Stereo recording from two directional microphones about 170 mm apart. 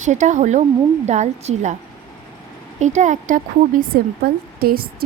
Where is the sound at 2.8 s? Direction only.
45° right (ahead or behind).